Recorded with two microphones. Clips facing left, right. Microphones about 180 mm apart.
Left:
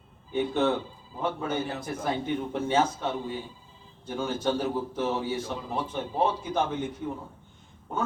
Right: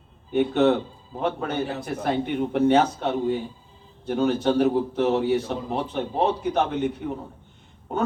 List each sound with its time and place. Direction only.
0.3 s a man's voice: 65° right (ahead or behind)